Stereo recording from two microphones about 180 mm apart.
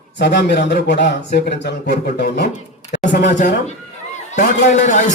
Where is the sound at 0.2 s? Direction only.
70° left (ahead or behind).